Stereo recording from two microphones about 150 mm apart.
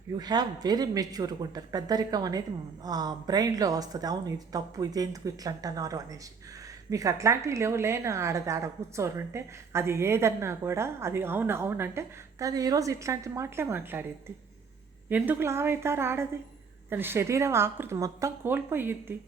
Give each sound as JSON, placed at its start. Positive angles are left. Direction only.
{"t": 0.2, "sound": "a woman's voice", "side_deg": -25}
{"t": 15.1, "sound": "a woman's voice", "side_deg": -15}